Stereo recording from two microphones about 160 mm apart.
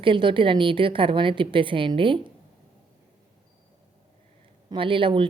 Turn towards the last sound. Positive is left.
turn(degrees=-30)  # may be behind; listen again after turning